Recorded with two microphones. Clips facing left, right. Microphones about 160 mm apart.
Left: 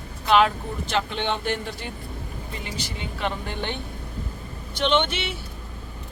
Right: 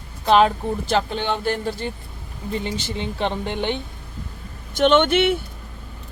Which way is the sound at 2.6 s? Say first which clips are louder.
Right 6 dB; 25° right (ahead or behind).